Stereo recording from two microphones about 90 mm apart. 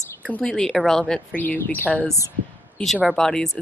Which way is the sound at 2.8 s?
Centre (ahead or behind).